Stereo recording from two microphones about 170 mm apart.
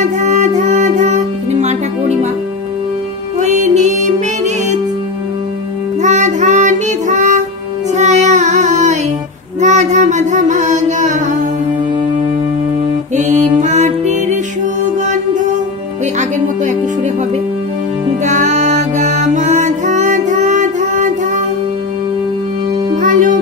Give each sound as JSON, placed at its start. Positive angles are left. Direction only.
{"t": 0.2, "sound": "music", "side_deg": -45}
{"t": 3.3, "sound": "music", "side_deg": -45}
{"t": 6.0, "sound": "music", "side_deg": -45}
{"t": 7.9, "sound": "child singing", "side_deg": -45}
{"t": 13.1, "sound": "music", "side_deg": -45}
{"t": 18.2, "sound": "music", "side_deg": -45}
{"t": 22.9, "sound": "music", "side_deg": -50}